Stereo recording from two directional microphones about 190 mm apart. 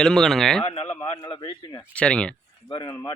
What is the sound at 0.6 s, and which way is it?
A man's voice, 30° left (ahead or behind).